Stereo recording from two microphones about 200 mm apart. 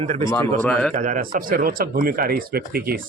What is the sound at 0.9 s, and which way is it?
Speech, 40° right (ahead or behind).